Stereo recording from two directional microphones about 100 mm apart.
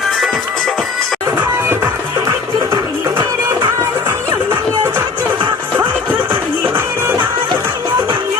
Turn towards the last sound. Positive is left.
turn(degrees=-20)  # may be behind; listen again after turning